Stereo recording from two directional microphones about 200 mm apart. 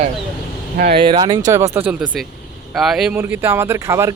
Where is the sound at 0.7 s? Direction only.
50° right (ahead or behind).